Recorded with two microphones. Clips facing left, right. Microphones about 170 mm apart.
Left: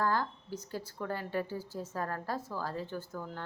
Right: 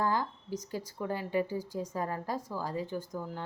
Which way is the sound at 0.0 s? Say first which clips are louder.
Right 1 dB; 15° right (ahead or behind).